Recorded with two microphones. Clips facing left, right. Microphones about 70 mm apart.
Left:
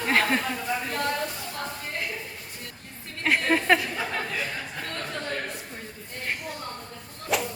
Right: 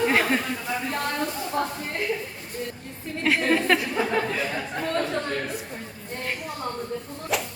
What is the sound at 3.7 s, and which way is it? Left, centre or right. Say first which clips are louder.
Speech: right 5 dB; centre.